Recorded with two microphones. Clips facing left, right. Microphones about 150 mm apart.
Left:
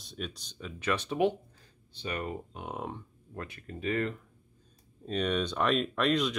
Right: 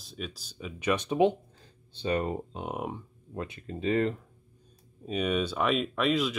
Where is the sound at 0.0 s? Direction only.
Centre (ahead or behind); by 4.1 s 25° right (ahead or behind).